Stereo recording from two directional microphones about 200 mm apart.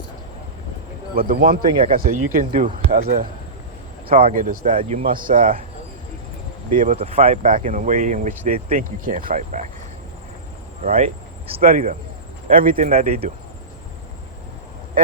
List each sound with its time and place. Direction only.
1.3 s speech: 45° right (ahead or behind)
6.7 s speech: 35° right (ahead or behind)
10.8 s speech: 35° right (ahead or behind)
11.6 s speech: 40° right (ahead or behind)
12.9 s speech: 30° right (ahead or behind)